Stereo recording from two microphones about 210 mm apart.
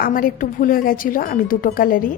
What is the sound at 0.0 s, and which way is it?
A woman's voice, 45° left (ahead or behind).